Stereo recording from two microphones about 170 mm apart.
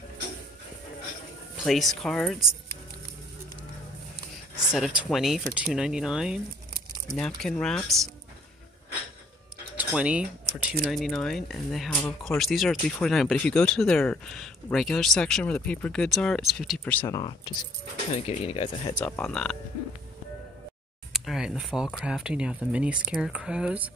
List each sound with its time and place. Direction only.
1.6 s speech: centre (ahead or behind)
4.7 s speech: centre (ahead or behind)
9.8 s speech: 5° right (ahead or behind); by 17.2 s 10° left (ahead or behind)
18.1 s speech: 35° left (ahead or behind)
18.9 s speech: 10° left (ahead or behind)
21.1 s speech: centre (ahead or behind)